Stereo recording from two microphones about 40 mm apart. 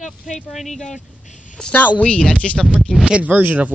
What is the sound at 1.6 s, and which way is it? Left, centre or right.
Speech, centre.